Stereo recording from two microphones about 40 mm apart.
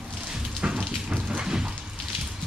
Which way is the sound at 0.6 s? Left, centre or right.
Right.